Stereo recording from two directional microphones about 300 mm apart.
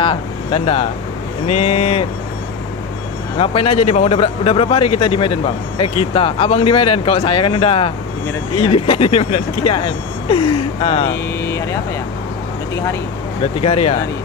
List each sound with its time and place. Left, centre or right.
0.0 s speech: centre
3.3 s speech: centre
13.6 s speech: centre